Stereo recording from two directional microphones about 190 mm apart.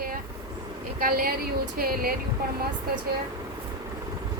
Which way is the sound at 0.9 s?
50° right (ahead or behind).